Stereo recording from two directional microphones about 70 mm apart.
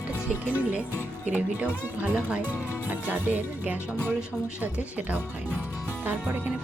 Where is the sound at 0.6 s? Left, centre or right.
Right.